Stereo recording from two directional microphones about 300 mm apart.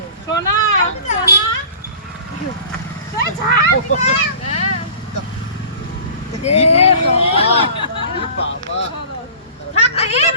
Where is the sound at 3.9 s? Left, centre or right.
Left.